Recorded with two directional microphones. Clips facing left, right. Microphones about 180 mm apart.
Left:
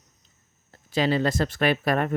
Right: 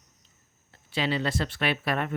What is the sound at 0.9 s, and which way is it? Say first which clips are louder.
Speech: left 5 dB; 45° left (ahead or behind).